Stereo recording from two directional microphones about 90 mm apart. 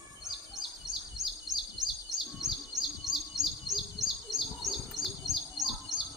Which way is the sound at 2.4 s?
5° right (ahead or behind).